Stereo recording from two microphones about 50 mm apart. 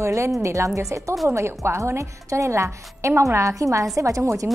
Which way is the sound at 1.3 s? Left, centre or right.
Right.